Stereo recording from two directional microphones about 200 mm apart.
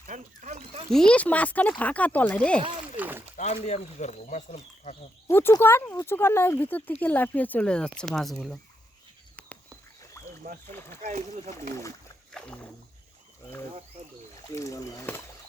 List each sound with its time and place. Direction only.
0.0 s a sound: 40° right (ahead or behind)
0.9 s speech: 5° left (ahead or behind)
3.0 s a sound: 10° right (ahead or behind)
3.3 s speech: 35° left (ahead or behind)
5.3 s speech: 10° left (ahead or behind)
10.2 s rowboat: 15° left (ahead or behind)
10.7 s speech: 10° left (ahead or behind)
11.0 s speech: 35° right (ahead or behind)
12.3 s speech: 5° left (ahead or behind)
14.4 s speech: 15° left (ahead or behind)